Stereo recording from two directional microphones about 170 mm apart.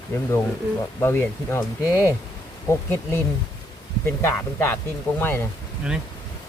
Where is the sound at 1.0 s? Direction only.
15° left (ahead or behind).